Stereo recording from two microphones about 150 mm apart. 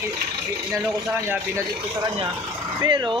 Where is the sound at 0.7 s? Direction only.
15° right (ahead or behind).